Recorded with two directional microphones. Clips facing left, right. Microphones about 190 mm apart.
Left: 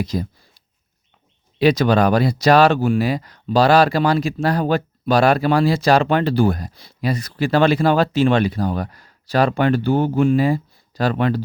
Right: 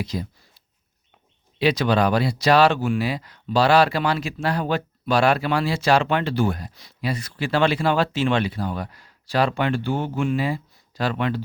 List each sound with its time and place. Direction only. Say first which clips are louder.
0.0 s speech: left 5 dB; 45° left (ahead or behind)
1.5 s speech: left 5 dB; 45° left (ahead or behind)